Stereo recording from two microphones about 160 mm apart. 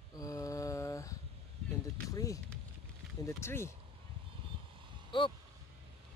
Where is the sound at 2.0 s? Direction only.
20° left (ahead or behind).